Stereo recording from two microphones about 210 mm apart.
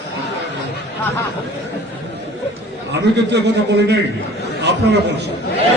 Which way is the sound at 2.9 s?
55° right (ahead or behind).